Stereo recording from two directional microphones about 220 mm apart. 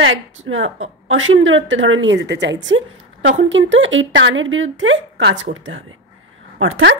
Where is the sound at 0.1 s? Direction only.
65° right (ahead or behind).